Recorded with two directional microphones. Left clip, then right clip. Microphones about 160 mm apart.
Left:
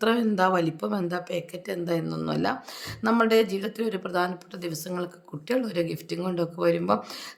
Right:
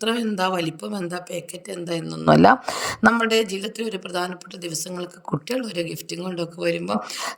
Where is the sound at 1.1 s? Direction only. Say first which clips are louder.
Even; 5° left (ahead or behind).